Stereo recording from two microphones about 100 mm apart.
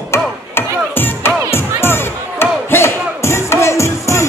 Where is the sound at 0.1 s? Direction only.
20° left (ahead or behind).